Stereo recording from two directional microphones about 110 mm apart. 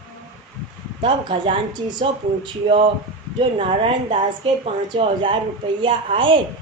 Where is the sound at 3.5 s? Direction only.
55° right (ahead or behind).